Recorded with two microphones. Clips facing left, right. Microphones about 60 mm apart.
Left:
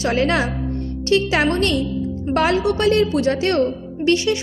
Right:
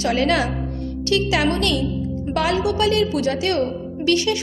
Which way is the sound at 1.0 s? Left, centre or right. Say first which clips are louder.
Left 2 dB; left.